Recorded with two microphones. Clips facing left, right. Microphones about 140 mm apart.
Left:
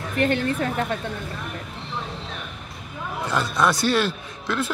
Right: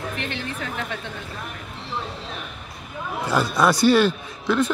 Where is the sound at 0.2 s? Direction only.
45° left (ahead or behind).